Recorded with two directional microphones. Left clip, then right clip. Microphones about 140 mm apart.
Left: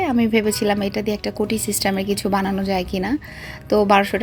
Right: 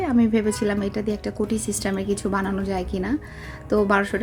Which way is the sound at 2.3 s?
10° left (ahead or behind).